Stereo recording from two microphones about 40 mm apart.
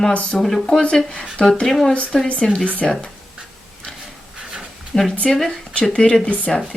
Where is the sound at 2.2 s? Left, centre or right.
Left.